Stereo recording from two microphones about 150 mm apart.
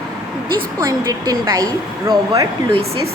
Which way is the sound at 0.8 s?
25° right (ahead or behind).